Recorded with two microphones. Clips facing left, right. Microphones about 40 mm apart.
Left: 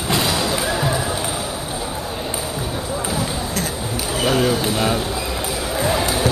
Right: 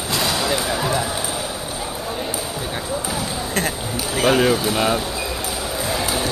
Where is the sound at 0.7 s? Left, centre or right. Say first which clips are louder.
Left 1 dB; centre.